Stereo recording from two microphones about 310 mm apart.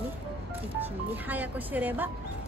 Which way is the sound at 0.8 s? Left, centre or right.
Centre.